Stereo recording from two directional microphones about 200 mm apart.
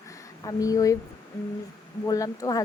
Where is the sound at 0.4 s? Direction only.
15° left (ahead or behind).